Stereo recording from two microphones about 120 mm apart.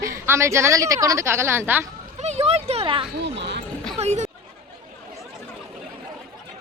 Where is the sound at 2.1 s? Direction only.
65° right (ahead or behind); by 3.1 s 45° right (ahead or behind).